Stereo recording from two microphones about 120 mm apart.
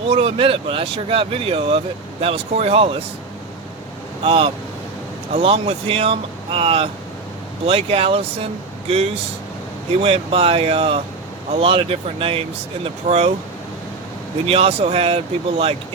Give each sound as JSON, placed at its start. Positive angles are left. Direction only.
{"t": 0.1, "sound": "speech", "side_deg": -55}
{"t": 4.2, "sound": "speech", "side_deg": -55}
{"t": 9.9, "sound": "speech", "side_deg": -55}
{"t": 12.8, "sound": "speech", "side_deg": -60}
{"t": 14.4, "sound": "speech", "side_deg": -55}